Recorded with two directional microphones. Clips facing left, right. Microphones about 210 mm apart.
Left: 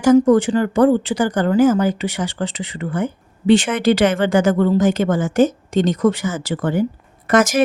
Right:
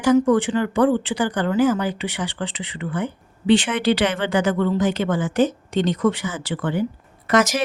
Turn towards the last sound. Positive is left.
turn(degrees=50)  # may be behind; listen again after turning